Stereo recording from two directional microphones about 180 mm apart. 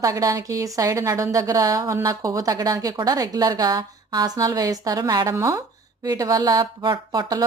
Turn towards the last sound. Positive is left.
turn(degrees=-20)  # may be behind; listen again after turning